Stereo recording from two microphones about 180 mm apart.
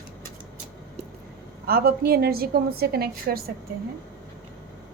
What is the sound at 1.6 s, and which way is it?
A woman's voice, 55° right (ahead or behind).